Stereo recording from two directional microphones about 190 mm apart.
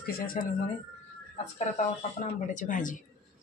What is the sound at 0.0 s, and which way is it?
Speech, 50° left (ahead or behind).